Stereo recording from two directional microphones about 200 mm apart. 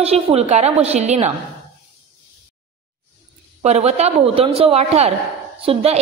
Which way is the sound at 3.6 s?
35° right (ahead or behind).